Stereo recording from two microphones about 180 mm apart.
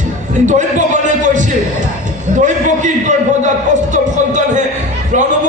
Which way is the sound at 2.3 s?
45° right (ahead or behind).